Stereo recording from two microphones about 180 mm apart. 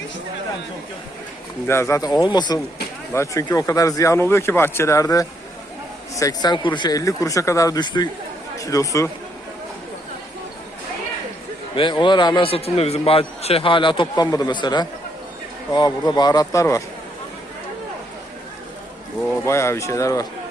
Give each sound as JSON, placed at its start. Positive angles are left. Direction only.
{"t": 1.6, "sound": "a man's voice", "side_deg": 15}
{"t": 11.7, "sound": "a man's voice", "side_deg": 25}
{"t": 19.5, "sound": "speech", "side_deg": 15}